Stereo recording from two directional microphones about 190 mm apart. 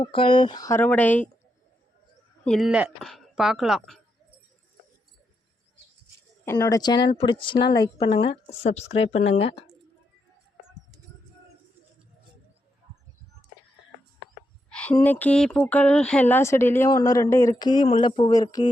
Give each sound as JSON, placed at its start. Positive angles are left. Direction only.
{"t": 0.0, "sound": "a woman's voice", "side_deg": 30}
{"t": 2.4, "sound": "speech", "side_deg": 0}
{"t": 6.4, "sound": "a woman's voice", "side_deg": 15}
{"t": 14.7, "sound": "a sound", "side_deg": 5}
{"t": 15.0, "sound": "speech", "side_deg": 10}